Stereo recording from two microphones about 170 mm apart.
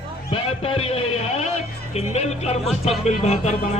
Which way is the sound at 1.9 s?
40° left (ahead or behind).